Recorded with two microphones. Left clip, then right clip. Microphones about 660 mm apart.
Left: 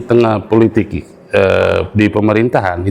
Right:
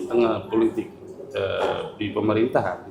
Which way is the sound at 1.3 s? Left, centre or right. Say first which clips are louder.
Left 14 dB; left.